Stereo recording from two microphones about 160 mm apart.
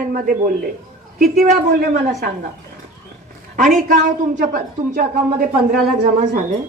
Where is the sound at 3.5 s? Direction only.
55° right (ahead or behind).